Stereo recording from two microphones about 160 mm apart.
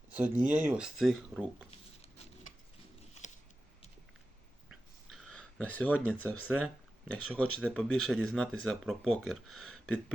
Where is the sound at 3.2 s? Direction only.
50° left (ahead or behind).